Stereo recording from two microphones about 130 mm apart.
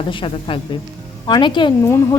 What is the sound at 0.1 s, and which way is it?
Speech, 40° left (ahead or behind).